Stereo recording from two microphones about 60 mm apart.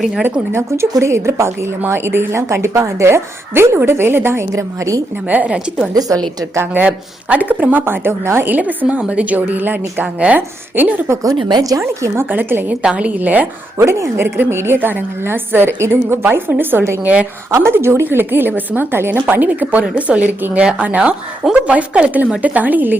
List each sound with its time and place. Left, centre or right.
0.5 s a woman's voice: right
2.3 s a woman's voice: right
5.3 s a woman's voice: right
5.9 s a woman's voice: right
6.8 s a woman's voice: right
8.5 s a woman's voice: right
11.2 s a woman's voice: right
11.8 s a woman's voice: right
12.3 s a woman's voice: right
12.8 s a woman's voice: centre
13.7 s a woman's voice: right
17.0 s a woman's voice: right
17.5 s a woman's voice: right